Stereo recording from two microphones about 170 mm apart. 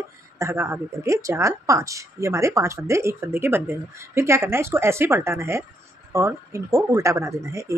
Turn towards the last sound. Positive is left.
turn(degrees=-20)  # may be behind; listen again after turning